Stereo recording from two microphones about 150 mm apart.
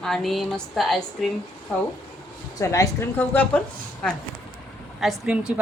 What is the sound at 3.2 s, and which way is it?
Speech, 10° left (ahead or behind).